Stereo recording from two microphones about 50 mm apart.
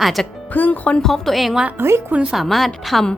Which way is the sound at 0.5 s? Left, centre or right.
Left.